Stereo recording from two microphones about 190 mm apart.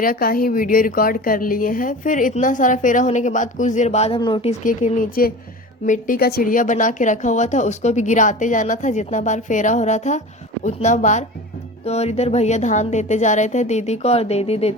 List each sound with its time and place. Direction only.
0.0 s a woman's voice: 50° left (ahead or behind); by 4.5 s 25° left (ahead or behind)
4.6 s a woman's voice: 45° left (ahead or behind)